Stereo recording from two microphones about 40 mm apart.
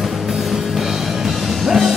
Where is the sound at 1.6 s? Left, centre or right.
Centre.